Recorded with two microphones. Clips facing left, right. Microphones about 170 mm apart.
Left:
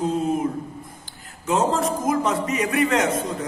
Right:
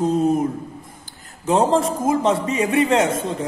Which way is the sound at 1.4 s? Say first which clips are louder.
Right 4 dB; 30° right (ahead or behind).